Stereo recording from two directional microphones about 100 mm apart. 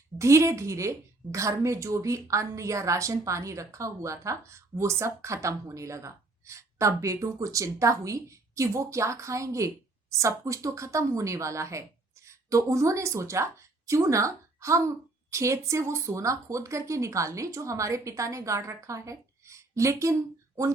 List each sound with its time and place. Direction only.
0.2 s a woman's voice: 30° right (ahead or behind)